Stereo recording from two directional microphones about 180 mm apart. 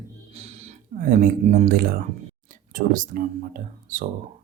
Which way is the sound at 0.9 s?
50° right (ahead or behind).